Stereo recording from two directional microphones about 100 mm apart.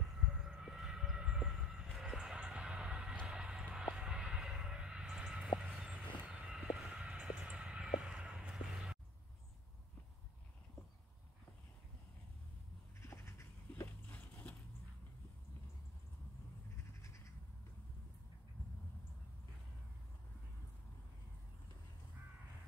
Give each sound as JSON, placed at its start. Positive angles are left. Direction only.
{"t": 0.2, "sound": "siren", "side_deg": -5}
{"t": 5.8, "sound": "vehicle", "side_deg": -10}
{"t": 13.1, "sound": "a sound", "side_deg": 25}